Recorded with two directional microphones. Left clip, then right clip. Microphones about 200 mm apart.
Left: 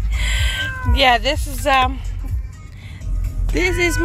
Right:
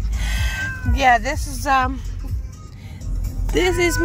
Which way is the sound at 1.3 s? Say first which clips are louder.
Left 2 dB; 30° left (ahead or behind).